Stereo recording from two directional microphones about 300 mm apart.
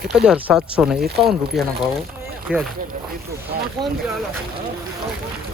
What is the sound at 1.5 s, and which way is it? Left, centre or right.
Speech, centre.